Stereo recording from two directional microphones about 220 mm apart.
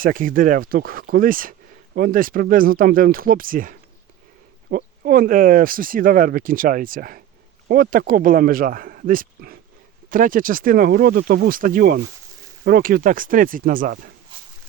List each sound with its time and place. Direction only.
0.0 s speech: 40° right (ahead or behind)